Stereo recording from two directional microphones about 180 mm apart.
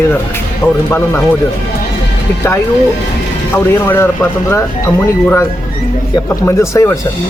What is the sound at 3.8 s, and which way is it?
Speech, 15° left (ahead or behind).